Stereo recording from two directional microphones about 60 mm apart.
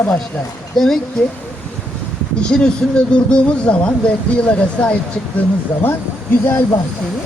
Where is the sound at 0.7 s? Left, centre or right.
Centre.